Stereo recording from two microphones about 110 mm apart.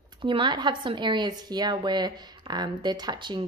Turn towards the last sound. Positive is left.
turn(degrees=-40)  # may be behind; listen again after turning